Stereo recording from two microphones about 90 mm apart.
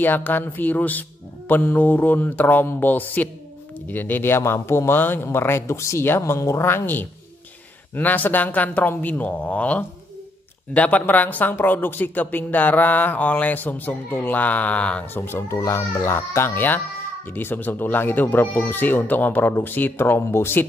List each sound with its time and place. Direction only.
0.0 s speech: 20° left (ahead or behind)
15.1 s speech: 25° left (ahead or behind)